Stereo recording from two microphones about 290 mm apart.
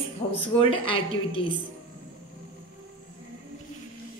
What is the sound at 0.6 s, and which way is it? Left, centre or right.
Speech, centre.